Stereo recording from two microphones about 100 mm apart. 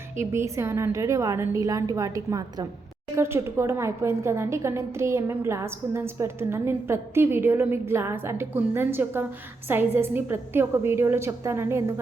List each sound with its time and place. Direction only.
0.2 s a woman's voice: 30° right (ahead or behind)
3.2 s a woman's voice: 25° right (ahead or behind)